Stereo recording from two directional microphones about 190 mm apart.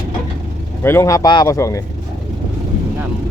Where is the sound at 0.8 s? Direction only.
15° left (ahead or behind).